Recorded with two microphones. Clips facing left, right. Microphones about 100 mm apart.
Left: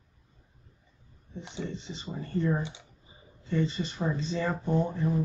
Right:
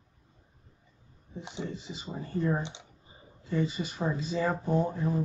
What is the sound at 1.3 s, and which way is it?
Speech, 15° right (ahead or behind).